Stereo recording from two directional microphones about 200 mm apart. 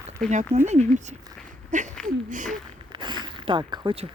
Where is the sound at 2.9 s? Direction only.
20° right (ahead or behind).